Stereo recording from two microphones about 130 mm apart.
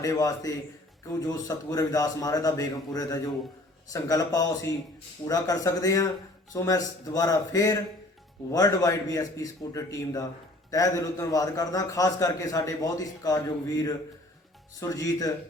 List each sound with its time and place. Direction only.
0.0 s a man's voice: 25° left (ahead or behind)